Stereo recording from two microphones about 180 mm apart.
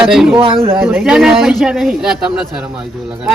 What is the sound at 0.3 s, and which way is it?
Speech, 30° right (ahead or behind).